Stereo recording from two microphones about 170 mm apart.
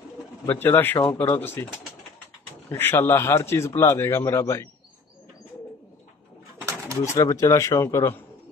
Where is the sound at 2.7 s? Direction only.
15° left (ahead or behind).